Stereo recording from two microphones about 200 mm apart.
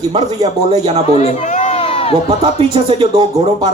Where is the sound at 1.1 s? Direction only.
35° left (ahead or behind).